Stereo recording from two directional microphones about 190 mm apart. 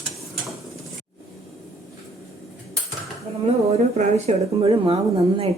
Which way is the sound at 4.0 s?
30° right (ahead or behind).